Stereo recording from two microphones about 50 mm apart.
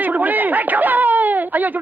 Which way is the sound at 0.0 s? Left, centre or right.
Right.